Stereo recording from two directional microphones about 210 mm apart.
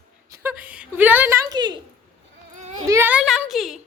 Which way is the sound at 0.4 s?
5° right (ahead or behind).